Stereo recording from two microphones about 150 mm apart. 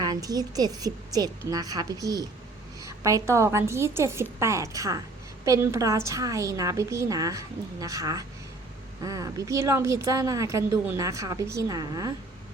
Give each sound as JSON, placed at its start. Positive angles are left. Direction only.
{"t": 0.0, "sound": "a woman's voice", "side_deg": -25}